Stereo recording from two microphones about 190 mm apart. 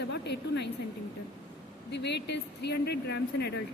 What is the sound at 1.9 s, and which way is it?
A woman's voice, 65° left (ahead or behind).